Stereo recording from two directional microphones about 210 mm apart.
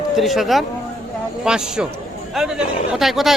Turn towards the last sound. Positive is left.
turn(degrees=0)  # may be behind; listen again after turning